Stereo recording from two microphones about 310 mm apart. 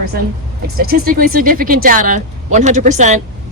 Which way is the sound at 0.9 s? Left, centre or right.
Right.